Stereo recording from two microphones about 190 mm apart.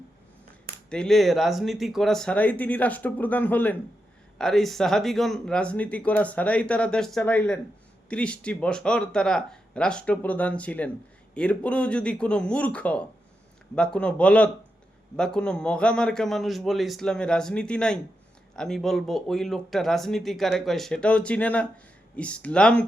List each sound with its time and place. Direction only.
0.9 s speech: 5° left (ahead or behind)